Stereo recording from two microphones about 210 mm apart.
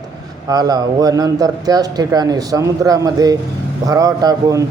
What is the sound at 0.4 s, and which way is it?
A man's voice, 20° right (ahead or behind).